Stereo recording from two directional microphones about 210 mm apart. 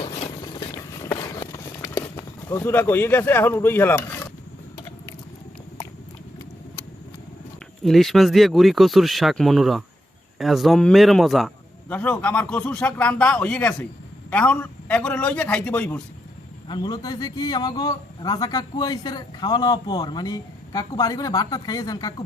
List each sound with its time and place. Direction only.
0.0 s a sound: 25° left (ahead or behind)
1.0 s run: 15° left (ahead or behind)
7.9 s a man's voice: centre (ahead or behind)
16.6 s a man's voice: 20° left (ahead or behind)